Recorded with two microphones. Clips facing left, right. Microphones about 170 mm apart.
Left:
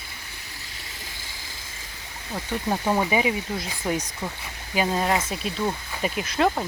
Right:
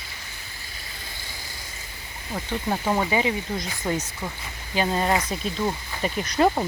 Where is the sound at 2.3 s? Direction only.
5° left (ahead or behind).